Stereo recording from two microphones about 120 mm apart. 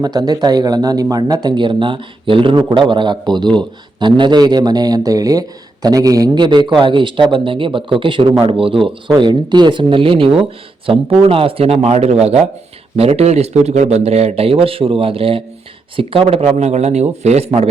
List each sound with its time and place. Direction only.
0.0 s speech: 35° right (ahead or behind); by 17.6 s 60° right (ahead or behind)